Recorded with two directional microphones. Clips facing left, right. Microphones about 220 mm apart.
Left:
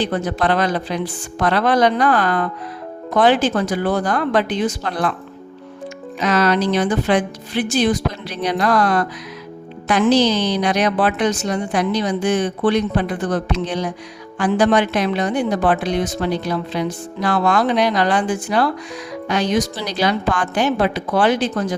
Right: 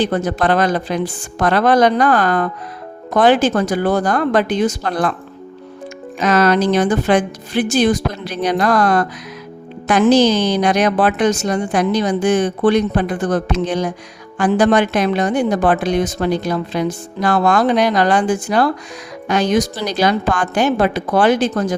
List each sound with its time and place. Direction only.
0.0 s a woman's voice: 45° right (ahead or behind)
6.1 s a woman's voice: 45° right (ahead or behind)